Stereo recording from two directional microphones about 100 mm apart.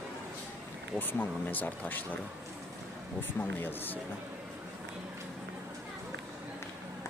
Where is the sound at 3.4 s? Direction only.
20° left (ahead or behind).